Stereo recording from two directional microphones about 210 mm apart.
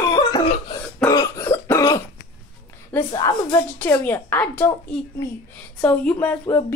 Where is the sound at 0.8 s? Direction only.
10° left (ahead or behind).